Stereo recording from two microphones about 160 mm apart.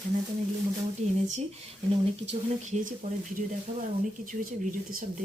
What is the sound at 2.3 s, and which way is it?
Speech, 45° right (ahead or behind).